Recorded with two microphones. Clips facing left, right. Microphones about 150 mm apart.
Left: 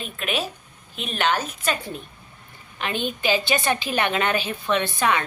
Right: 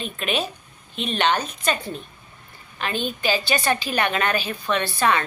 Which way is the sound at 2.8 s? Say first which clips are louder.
Even; 20° left (ahead or behind).